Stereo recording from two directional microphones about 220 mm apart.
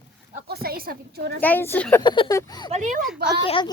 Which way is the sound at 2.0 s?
20° left (ahead or behind).